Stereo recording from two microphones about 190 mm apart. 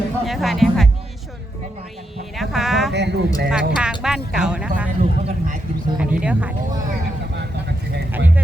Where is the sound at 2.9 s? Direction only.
65° right (ahead or behind).